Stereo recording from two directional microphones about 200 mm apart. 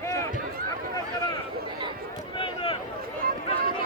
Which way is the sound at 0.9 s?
20° left (ahead or behind).